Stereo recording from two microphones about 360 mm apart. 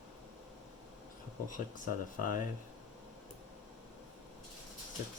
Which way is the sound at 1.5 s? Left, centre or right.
Left.